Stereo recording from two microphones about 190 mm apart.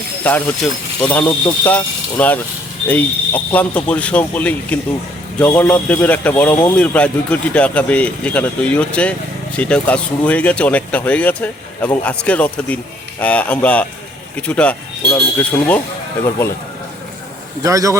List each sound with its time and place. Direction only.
0.3 s speech: 10° left (ahead or behind)
17.6 s speech: 15° right (ahead or behind)